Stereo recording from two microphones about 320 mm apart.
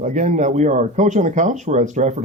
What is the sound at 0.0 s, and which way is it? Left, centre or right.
Speech, right.